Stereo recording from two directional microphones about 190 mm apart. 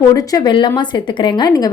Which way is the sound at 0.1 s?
20° left (ahead or behind).